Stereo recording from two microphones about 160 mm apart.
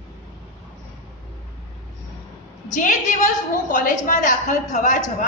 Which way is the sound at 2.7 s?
55° left (ahead or behind).